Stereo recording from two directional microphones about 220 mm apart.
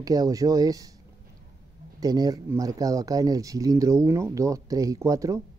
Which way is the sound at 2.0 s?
15° right (ahead or behind).